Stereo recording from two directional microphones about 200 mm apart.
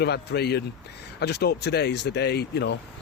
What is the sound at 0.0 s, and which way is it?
Speech, 55° left (ahead or behind).